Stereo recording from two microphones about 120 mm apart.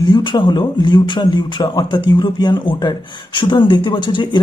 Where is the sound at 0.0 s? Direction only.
40° left (ahead or behind).